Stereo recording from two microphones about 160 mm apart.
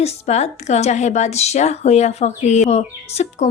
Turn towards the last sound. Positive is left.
turn(degrees=45)  # may be behind; listen again after turning